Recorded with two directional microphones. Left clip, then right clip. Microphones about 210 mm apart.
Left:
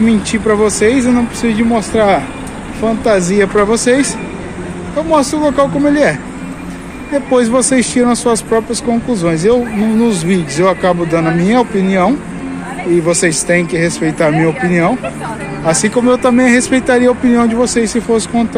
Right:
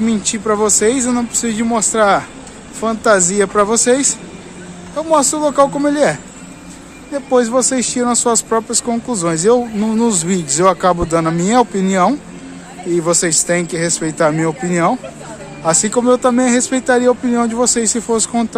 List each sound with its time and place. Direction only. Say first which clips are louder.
0.0 s speech: left 5 dB; 20° right (ahead or behind)
7.2 s speech: left 1 dB; 15° right (ahead or behind)
17.6 s speech: left 3 dB; 30° right (ahead or behind)